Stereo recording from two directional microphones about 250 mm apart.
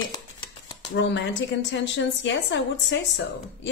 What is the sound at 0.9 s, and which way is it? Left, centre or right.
A woman's voice, left.